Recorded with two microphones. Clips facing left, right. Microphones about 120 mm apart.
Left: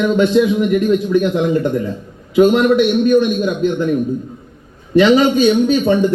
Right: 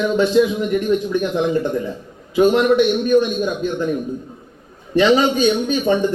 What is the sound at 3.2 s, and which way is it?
Speech, 35° right (ahead or behind).